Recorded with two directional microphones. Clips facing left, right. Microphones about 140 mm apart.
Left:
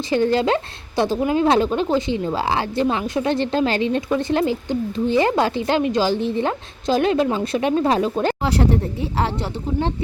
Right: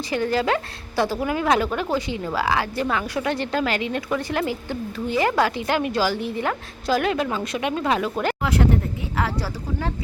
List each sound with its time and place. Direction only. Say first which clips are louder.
0.1 s a woman's voice: left 4 dB; 25° left (ahead or behind)